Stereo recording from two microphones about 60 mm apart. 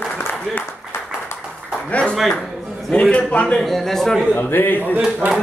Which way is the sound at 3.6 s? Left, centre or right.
Centre.